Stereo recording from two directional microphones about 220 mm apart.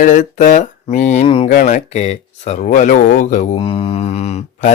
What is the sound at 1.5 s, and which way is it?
Speech, 35° left (ahead or behind).